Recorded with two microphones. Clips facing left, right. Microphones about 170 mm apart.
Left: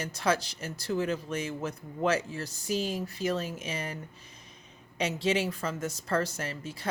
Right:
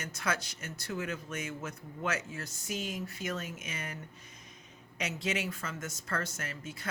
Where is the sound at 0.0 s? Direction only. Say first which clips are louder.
Left 7 dB; 30° left (ahead or behind).